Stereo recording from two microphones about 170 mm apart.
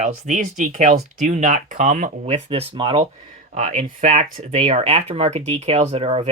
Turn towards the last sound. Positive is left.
turn(degrees=-35)  # may be behind; listen again after turning